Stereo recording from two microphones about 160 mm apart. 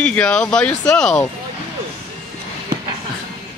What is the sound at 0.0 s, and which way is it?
Speech, 5° left (ahead or behind).